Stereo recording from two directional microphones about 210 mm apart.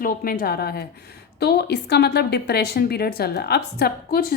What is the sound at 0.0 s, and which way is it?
A woman's voice, 45° left (ahead or behind).